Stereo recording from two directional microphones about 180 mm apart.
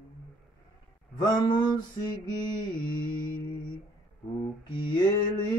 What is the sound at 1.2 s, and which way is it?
Mantra, 25° left (ahead or behind).